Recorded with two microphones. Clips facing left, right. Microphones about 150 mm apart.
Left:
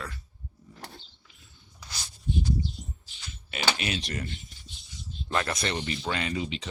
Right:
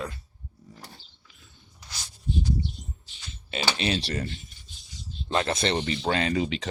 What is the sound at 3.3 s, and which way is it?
Speech, 30° right (ahead or behind).